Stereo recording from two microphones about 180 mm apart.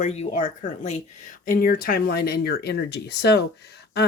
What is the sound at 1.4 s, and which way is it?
Speech, 55° left (ahead or behind).